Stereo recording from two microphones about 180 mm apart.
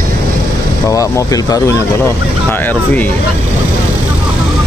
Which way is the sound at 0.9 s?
20° left (ahead or behind).